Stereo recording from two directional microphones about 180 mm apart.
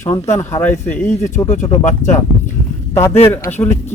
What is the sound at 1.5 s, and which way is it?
Speech, 35° left (ahead or behind).